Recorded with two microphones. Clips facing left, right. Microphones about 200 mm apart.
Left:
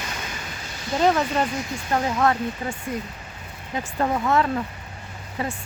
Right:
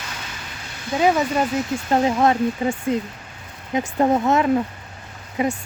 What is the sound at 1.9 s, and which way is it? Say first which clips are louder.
Speech: right 4 dB; 25° right (ahead or behind).